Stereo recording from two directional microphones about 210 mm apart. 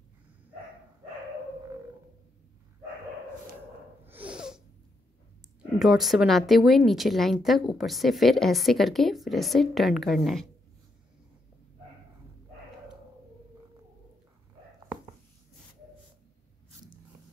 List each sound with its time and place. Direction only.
4.0 s snort: 10° right (ahead or behind)
5.6 s a woman's voice: centre (ahead or behind)